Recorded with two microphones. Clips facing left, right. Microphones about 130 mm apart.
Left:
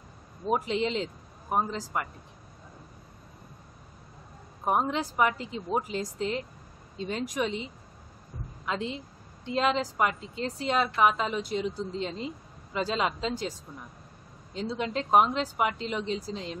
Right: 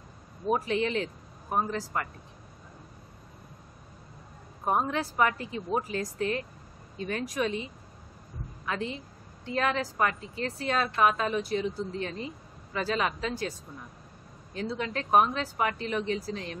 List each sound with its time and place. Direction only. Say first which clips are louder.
0.5 s speech: even; 20° left (ahead or behind)
4.6 s a woman's voice: left 1 dB; 15° left (ahead or behind)